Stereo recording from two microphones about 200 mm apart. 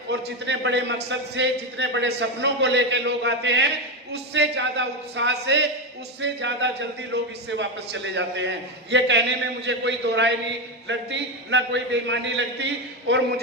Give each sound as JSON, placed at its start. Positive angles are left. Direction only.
{"t": 0.1, "sound": "a man's voice", "side_deg": -60}